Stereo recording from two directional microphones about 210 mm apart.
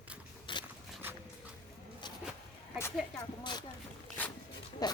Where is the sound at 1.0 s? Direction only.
10° right (ahead or behind).